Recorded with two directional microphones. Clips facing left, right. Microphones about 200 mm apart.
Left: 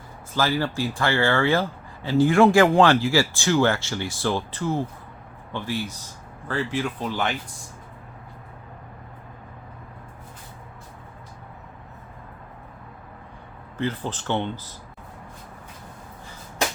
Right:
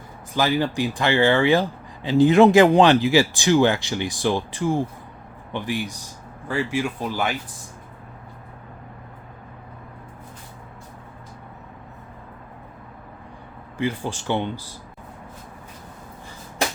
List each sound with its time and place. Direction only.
0.3 s speech: 15° right (ahead or behind)
13.7 s speech: 10° right (ahead or behind)